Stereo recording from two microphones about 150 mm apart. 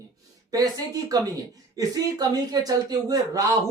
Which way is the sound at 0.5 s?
25° right (ahead or behind).